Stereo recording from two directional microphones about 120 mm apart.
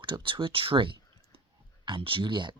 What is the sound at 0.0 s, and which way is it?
Speech, 45° right (ahead or behind).